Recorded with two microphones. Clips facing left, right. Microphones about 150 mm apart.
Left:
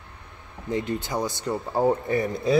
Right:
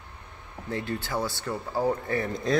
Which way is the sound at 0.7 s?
20° left (ahead or behind).